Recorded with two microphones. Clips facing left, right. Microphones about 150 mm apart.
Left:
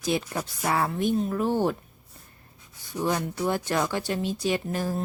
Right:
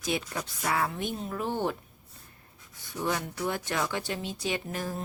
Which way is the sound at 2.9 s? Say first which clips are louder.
Left 4 dB; 40° left (ahead or behind).